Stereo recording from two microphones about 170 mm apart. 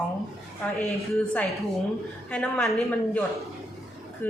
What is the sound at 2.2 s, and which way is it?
Speech, 10° left (ahead or behind).